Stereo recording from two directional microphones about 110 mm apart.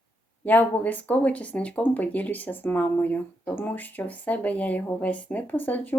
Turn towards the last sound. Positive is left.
turn(degrees=15)  # may be behind; listen again after turning